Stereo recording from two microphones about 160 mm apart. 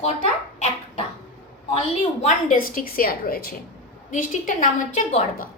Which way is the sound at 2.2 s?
55° left (ahead or behind).